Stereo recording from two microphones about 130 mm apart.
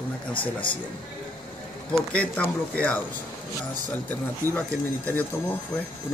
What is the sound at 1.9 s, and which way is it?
Speech, 10° left (ahead or behind).